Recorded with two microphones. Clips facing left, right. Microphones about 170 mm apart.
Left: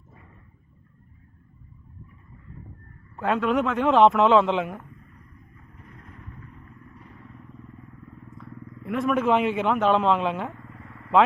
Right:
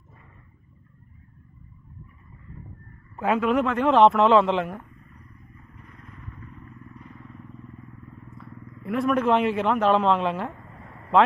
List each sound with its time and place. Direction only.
3.2 s speech: 5° right (ahead or behind)
8.4 s speech: centre (ahead or behind)